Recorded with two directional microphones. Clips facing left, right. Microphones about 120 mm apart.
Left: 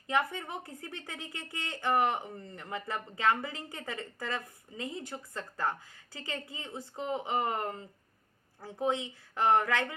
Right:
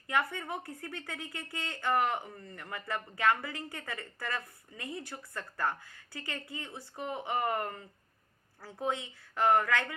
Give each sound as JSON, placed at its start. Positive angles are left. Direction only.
{"t": 0.1, "sound": "a woman's voice", "side_deg": 20}